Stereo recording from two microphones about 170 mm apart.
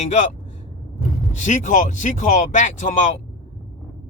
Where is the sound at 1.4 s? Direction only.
45° left (ahead or behind).